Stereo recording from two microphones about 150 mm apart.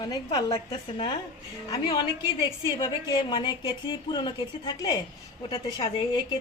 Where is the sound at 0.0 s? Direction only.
25° left (ahead or behind).